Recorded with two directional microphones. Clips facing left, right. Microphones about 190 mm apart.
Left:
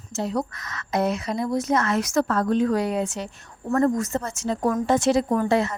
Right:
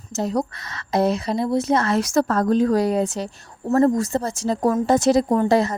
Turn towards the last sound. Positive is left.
turn(degrees=-35)  # may be behind; listen again after turning